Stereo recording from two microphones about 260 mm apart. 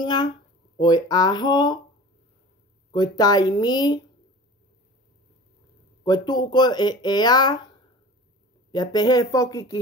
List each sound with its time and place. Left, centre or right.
0.0 s speech: centre
2.9 s speech: centre
6.0 s speech: centre
8.7 s speech: centre